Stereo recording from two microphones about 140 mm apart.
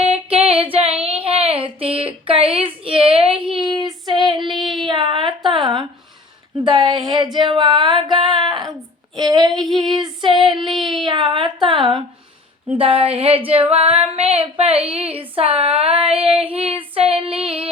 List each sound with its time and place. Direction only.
0.0 s female singing: 45° right (ahead or behind)
1.0 s a sound: 45° right (ahead or behind)
3.4 s female singing: 35° right (ahead or behind)
4.6 s child singing: centre (ahead or behind)
4.9 s a sound: 35° right (ahead or behind)
6.7 s speech: 35° right (ahead or behind)
9.1 s child singing: 30° right (ahead or behind)
10.0 s female singing: 35° right (ahead or behind)
11.0 s a sound: 35° right (ahead or behind)
12.7 s speech: 40° right (ahead or behind)
13.7 s music: 45° right (ahead or behind)
14.8 s a sound: 45° right (ahead or behind)
16.1 s female singing: 40° right (ahead or behind)